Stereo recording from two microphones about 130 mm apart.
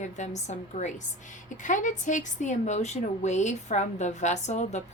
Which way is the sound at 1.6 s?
75° left (ahead or behind).